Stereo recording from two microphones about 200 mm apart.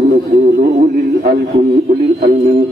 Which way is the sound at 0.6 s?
50° right (ahead or behind).